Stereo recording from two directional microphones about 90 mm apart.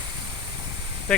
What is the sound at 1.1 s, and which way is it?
Speech, 10° left (ahead or behind).